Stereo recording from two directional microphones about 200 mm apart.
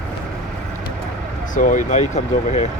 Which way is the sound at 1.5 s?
40° left (ahead or behind).